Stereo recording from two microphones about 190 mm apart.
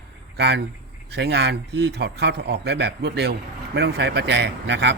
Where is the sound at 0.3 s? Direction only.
60° right (ahead or behind).